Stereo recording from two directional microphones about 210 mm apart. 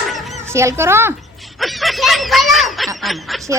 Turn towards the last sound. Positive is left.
turn(degrees=0)  # may be behind; listen again after turning